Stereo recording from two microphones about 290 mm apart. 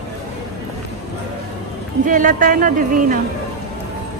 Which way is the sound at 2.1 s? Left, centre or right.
Right.